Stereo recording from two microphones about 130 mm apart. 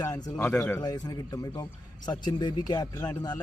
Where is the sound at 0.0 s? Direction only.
25° left (ahead or behind).